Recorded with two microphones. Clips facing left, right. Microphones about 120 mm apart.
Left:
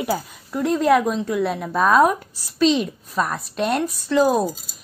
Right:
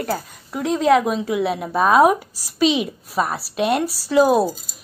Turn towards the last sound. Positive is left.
turn(degrees=-5)  # may be behind; listen again after turning